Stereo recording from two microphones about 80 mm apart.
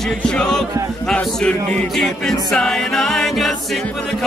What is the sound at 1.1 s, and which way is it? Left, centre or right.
Speech, centre.